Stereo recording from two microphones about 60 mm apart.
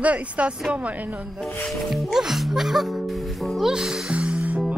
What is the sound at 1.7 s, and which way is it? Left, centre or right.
Music, centre.